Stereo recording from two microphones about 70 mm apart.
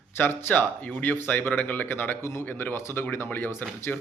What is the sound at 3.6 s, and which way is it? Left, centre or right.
Speech, left.